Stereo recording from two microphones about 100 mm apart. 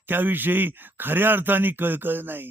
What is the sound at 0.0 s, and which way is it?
Speech, 20° right (ahead or behind).